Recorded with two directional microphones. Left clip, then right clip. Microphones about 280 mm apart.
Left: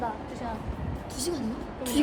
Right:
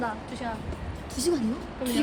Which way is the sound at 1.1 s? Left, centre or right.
Centre.